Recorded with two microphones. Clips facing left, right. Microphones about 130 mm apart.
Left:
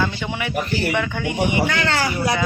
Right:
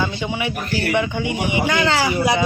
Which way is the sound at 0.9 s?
15° right (ahead or behind).